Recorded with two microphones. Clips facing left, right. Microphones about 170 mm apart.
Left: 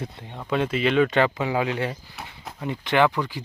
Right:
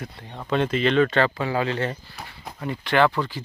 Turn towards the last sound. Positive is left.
turn(degrees=15)  # may be behind; listen again after turning